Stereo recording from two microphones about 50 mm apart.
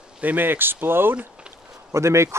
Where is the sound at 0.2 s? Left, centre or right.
Right.